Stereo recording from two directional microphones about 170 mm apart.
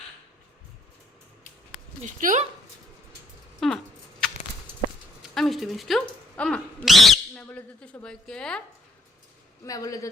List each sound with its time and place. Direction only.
2.0 s speech: 50° right (ahead or behind)
3.6 s a sound: centre (ahead or behind)
5.2 s speech: centre (ahead or behind)
9.6 s a man's voice: 20° left (ahead or behind)